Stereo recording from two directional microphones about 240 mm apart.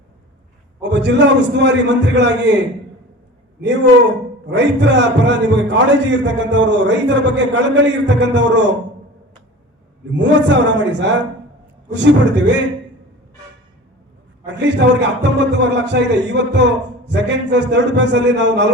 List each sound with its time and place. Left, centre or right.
0.8 s a man's voice: right
4.4 s a man's voice: right
10.1 s a man's voice: right
14.4 s a man's voice: right